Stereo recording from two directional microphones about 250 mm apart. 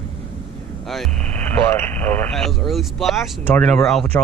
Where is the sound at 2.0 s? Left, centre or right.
Centre.